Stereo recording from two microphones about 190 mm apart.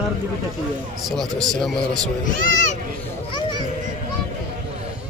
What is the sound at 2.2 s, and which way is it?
Speech, 40° left (ahead or behind).